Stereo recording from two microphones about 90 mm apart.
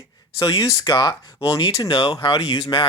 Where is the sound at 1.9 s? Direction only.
60° left (ahead or behind).